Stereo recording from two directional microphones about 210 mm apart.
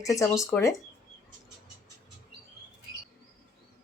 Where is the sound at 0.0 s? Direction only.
15° left (ahead or behind).